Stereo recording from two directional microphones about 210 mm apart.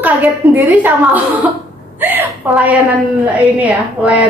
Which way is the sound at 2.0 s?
10° right (ahead or behind).